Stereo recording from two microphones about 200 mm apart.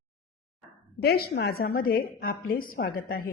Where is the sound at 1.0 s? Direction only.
55° left (ahead or behind).